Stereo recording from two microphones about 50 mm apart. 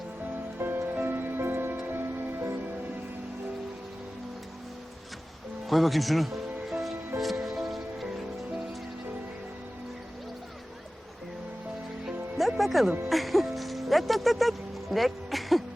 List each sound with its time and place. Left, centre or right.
0.6 s music: right
5.6 s speech: centre
7.2 s music: centre
12.4 s music: centre